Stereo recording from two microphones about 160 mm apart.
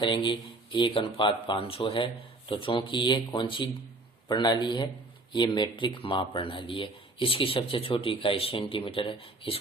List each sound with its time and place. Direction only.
0.0 s speech: 30° left (ahead or behind)